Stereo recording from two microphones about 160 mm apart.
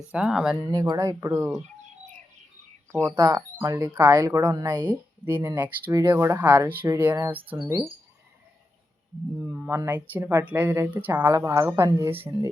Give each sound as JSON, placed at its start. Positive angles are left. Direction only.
{"t": 0.1, "sound": "speech", "side_deg": -5}
{"t": 0.6, "sound": "speech", "side_deg": -25}
{"t": 3.2, "sound": "speech", "side_deg": -20}
{"t": 4.9, "sound": "a woman's voice", "side_deg": -15}
{"t": 9.4, "sound": "a woman's voice", "side_deg": -10}